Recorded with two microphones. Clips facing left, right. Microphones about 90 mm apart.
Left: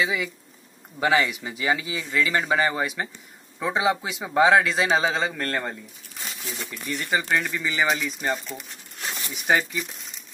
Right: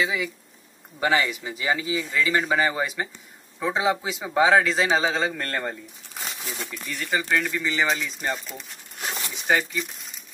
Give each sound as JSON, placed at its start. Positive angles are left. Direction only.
{"t": 0.0, "sound": "speech", "side_deg": 0}
{"t": 7.0, "sound": "speech", "side_deg": 15}
{"t": 7.4, "sound": "speech", "side_deg": 5}
{"t": 9.5, "sound": "speech", "side_deg": 15}